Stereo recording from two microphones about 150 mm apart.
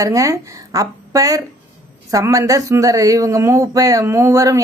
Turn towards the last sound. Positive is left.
turn(degrees=-20)  # may be behind; listen again after turning